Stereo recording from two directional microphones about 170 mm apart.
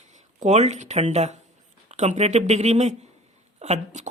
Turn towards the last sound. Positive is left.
turn(degrees=-45)  # may be behind; listen again after turning